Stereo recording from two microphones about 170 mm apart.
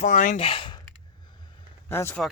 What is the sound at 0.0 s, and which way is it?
Speech, 50° left (ahead or behind).